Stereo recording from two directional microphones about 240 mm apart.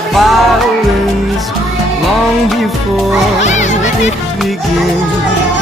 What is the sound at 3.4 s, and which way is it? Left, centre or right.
Music, left.